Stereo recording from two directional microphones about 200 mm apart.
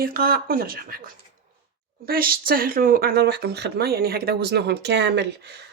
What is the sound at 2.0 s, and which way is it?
Speech, 50° right (ahead or behind).